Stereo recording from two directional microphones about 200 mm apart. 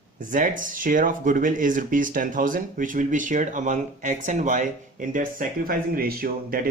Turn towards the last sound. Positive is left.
turn(degrees=-45)  # may be behind; listen again after turning